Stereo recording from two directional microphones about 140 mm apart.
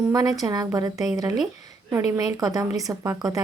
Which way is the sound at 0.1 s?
25° right (ahead or behind).